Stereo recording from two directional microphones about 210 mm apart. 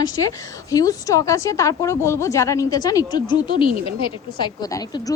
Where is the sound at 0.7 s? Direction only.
15° left (ahead or behind).